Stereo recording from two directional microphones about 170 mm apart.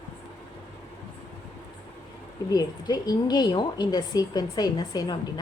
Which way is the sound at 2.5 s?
25° left (ahead or behind).